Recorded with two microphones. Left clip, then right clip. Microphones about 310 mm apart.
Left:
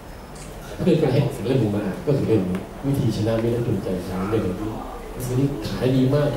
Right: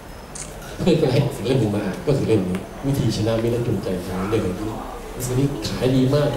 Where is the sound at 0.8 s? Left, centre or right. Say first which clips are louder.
Right 1 dB; centre.